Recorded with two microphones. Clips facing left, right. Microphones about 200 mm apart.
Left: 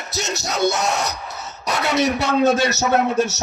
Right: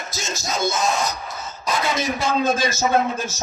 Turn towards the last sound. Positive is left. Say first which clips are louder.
# left 3 dB
turn(degrees=70)  # may be behind; listen again after turning